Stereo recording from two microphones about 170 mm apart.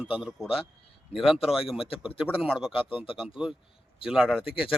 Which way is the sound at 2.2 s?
5° right (ahead or behind).